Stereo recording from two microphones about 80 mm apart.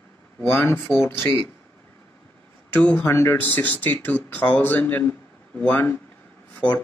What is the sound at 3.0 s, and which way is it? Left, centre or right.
Speech, left.